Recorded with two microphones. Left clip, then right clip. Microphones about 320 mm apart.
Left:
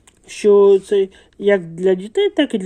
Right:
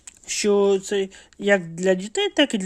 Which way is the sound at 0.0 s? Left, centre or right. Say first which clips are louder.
Left 7 dB; right.